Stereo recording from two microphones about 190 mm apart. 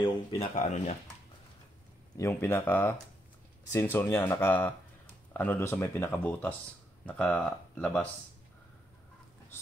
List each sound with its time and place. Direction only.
0.0 s speech: 30° left (ahead or behind)
2.1 s speech: 15° left (ahead or behind)